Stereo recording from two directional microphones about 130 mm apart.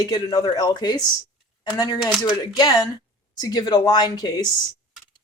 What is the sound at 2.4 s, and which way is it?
Speech, 30° left (ahead or behind).